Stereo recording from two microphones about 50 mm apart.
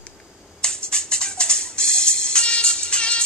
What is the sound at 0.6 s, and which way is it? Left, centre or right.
Music, centre.